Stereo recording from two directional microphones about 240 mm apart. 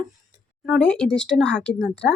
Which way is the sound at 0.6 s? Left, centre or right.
Centre.